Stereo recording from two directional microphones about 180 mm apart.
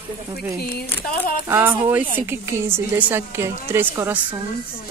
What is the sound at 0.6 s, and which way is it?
Speech, 60° left (ahead or behind).